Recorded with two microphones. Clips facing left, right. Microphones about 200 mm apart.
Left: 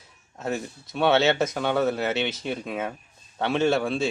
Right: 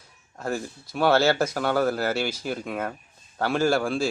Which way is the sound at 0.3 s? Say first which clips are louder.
Even; centre (ahead or behind).